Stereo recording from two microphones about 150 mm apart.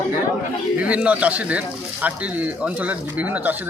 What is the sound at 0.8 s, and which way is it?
Speech, 10° right (ahead or behind).